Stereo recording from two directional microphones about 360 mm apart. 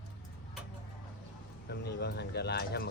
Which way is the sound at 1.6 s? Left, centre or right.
Left.